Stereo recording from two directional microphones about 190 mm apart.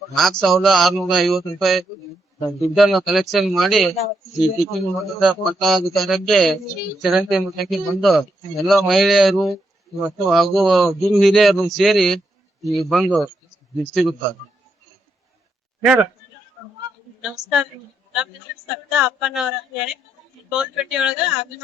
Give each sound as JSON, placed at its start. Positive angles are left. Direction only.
{"t": 0.1, "sound": "a man's voice", "side_deg": 0}
{"t": 15.8, "sound": "speech", "side_deg": -5}
{"t": 17.2, "sound": "a man's voice", "side_deg": -5}
{"t": 18.9, "sound": "a man's voice", "side_deg": -5}